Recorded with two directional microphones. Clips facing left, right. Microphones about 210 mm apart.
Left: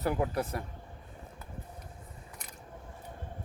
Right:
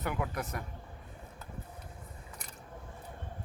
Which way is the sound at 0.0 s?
35° left (ahead or behind).